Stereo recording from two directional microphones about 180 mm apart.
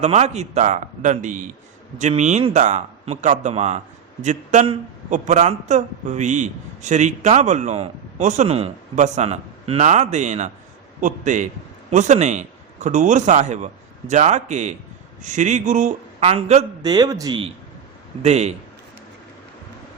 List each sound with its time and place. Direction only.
0.0 s a man's voice: 40° right (ahead or behind)
16.8 s speech: 20° right (ahead or behind)
18.2 s a man's voice: 35° right (ahead or behind)